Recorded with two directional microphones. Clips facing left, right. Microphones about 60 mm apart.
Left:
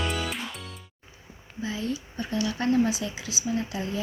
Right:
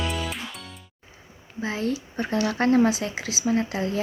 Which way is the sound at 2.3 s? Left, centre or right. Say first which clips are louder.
Right 4 dB; right.